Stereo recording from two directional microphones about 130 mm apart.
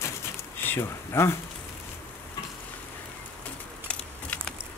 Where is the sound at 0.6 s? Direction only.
20° left (ahead or behind).